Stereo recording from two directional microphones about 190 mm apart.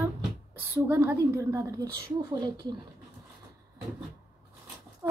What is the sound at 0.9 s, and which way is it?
A woman's voice, 15° right (ahead or behind).